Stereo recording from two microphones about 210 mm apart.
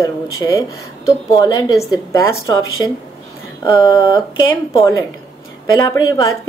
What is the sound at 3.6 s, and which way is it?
Speech, 20° left (ahead or behind).